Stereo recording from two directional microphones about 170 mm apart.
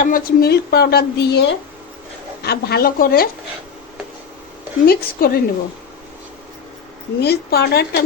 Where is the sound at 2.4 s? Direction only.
70° left (ahead or behind).